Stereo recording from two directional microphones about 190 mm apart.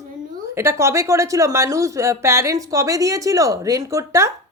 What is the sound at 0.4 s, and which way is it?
A woman's voice, 15° right (ahead or behind).